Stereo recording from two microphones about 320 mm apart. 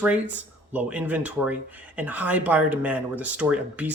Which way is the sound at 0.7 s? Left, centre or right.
Centre.